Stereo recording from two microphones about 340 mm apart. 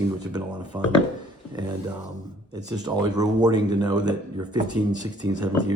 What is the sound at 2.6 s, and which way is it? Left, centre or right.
A man's voice, centre.